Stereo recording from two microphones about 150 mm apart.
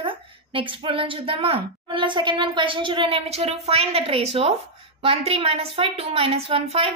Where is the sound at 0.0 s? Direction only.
35° right (ahead or behind).